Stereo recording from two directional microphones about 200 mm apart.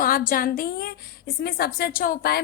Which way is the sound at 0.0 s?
45° left (ahead or behind).